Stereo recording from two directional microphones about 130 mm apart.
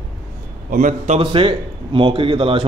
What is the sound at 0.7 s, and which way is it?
Speech, 75° right (ahead or behind).